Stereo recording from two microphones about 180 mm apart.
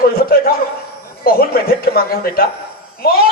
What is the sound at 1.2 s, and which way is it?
A man's voice, 55° left (ahead or behind).